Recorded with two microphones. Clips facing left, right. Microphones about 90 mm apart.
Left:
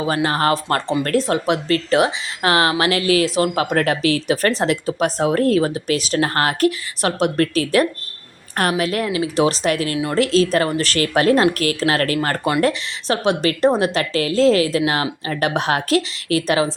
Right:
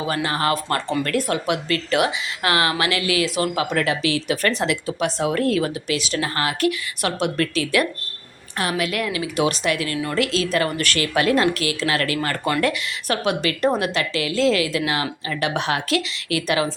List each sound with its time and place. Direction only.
0.1 s speech: 35° left (ahead or behind)